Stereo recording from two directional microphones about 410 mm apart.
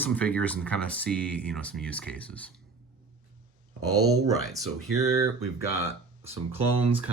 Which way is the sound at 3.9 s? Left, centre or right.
Right.